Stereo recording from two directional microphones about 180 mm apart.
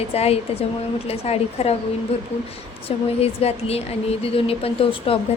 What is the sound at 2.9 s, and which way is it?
A woman's voice, 35° left (ahead or behind).